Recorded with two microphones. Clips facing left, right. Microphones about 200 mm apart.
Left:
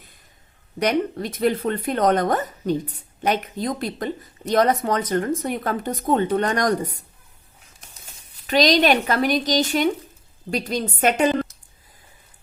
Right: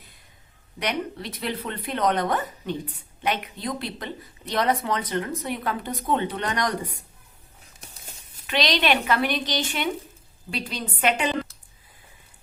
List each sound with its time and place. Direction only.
0.8 s speech: 45° left (ahead or behind)
8.4 s speech: 40° left (ahead or behind)